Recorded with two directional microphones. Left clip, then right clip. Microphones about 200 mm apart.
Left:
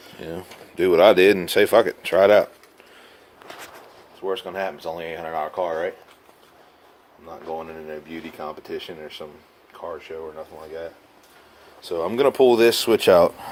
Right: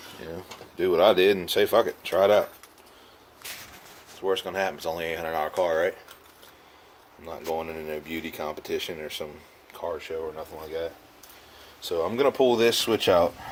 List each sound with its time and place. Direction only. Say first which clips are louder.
0.2 s speech: left 6 dB; 50° left (ahead or behind)
4.2 s speech: even; centre (ahead or behind)
7.4 s speech: right 1 dB; 10° right (ahead or behind)
11.9 s speech: left 4 dB; 40° left (ahead or behind)